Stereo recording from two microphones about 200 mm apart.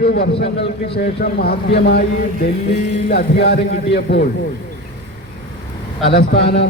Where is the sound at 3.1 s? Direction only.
55° left (ahead or behind).